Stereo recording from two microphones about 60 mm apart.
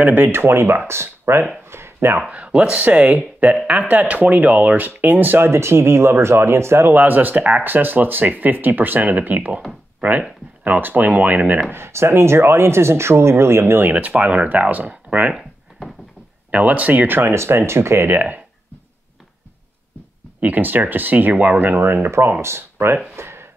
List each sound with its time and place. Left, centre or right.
0.0 s speech: right
1.7 s a sound: right
2.2 s speech: right
5.5 s speech: right
7.0 s speech: right
10.6 s speech: right
11.7 s speech: right
16.5 s speech: right
17.2 s speech: right
20.3 s speech: right
23.1 s a sound: right